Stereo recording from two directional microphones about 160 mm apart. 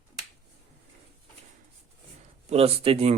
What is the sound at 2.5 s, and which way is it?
Speech, 40° right (ahead or behind).